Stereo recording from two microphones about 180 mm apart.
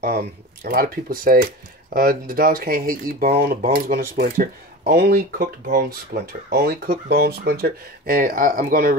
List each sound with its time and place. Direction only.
0.0 s speech: 55° right (ahead or behind)